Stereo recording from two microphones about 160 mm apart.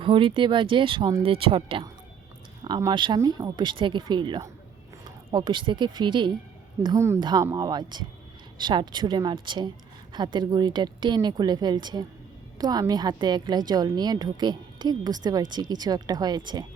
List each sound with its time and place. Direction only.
0.0 s a woman's voice: 35° right (ahead or behind)
6.8 s a woman's voice: 20° right (ahead or behind)